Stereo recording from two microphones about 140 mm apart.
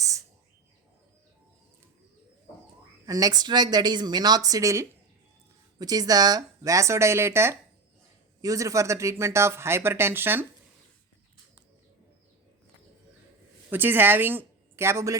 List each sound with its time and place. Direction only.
3.1 s speech: 25° right (ahead or behind)
13.7 s speech: 15° right (ahead or behind)